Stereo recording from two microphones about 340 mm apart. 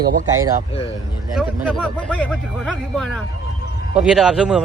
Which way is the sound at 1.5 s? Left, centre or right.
Centre.